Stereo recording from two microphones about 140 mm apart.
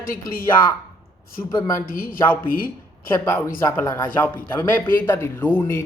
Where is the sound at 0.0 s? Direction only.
90° left.